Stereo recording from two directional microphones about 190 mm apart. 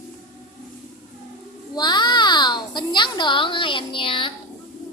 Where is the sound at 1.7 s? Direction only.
25° left (ahead or behind).